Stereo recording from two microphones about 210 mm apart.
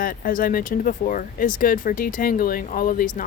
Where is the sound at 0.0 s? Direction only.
45° left (ahead or behind).